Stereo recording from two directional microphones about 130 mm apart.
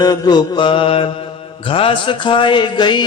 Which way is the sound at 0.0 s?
30° left (ahead or behind).